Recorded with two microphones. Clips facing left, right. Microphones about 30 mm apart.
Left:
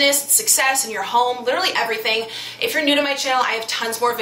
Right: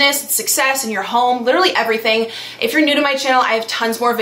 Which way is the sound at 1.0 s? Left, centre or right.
Centre.